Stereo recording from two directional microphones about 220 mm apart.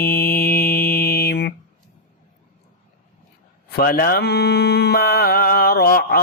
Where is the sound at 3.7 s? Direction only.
45° left (ahead or behind).